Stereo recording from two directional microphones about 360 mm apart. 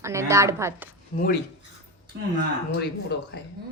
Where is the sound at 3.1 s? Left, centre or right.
Left.